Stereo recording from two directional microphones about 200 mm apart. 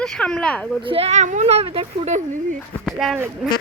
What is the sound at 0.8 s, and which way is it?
A woman's voice, 30° right (ahead or behind).